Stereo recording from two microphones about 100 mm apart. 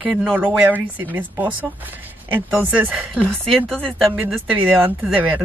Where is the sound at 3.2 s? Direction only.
10° left (ahead or behind).